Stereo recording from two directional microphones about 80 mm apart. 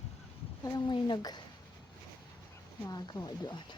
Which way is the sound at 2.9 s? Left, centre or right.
Left.